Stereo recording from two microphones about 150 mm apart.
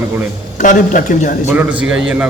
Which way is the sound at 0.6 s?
60° left (ahead or behind).